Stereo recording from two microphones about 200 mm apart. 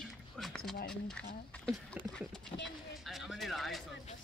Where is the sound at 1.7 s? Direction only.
Centre (ahead or behind).